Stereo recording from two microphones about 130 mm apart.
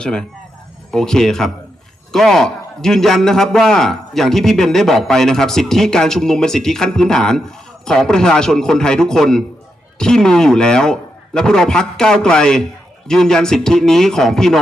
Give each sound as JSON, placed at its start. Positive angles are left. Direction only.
{"t": 0.0, "sound": "a man's voice", "side_deg": 5}